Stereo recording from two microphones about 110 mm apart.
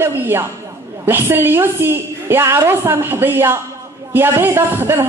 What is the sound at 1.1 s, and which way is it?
Speech, 20° right (ahead or behind).